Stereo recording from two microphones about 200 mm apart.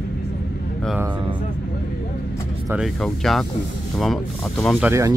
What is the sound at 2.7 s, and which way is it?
Speech, centre (ahead or behind).